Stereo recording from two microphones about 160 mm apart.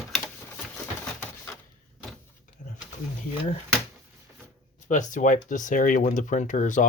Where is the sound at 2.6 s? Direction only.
50° left (ahead or behind).